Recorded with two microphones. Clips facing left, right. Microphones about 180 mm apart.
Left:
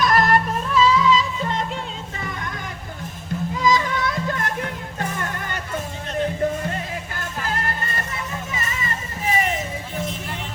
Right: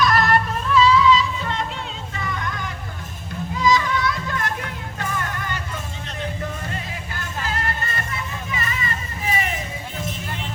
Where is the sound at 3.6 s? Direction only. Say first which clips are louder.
Right 1 dB; 50° left (ahead or behind).